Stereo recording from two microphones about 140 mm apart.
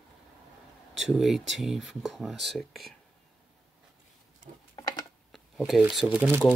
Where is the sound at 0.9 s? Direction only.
Centre (ahead or behind).